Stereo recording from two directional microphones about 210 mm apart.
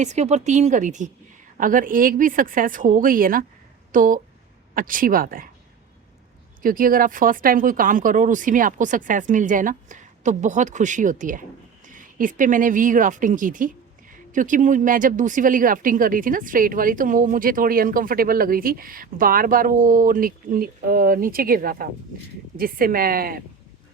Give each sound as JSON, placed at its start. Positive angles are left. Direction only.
{"t": 0.0, "sound": "a woman's voice", "side_deg": -35}
{"t": 6.6, "sound": "a woman's voice", "side_deg": -40}